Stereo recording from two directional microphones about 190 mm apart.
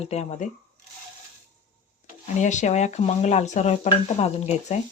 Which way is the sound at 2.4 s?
40° left (ahead or behind).